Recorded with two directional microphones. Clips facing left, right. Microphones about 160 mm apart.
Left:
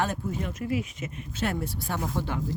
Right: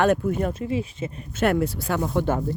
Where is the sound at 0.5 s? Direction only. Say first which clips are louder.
Right 3 dB; 30° right (ahead or behind).